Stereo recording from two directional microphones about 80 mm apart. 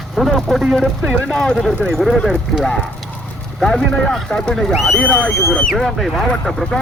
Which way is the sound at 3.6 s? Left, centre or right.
Centre.